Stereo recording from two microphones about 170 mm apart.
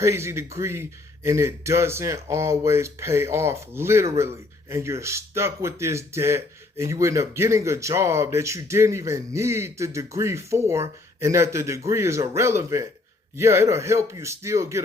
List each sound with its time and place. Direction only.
0.0 s speech: 15° right (ahead or behind)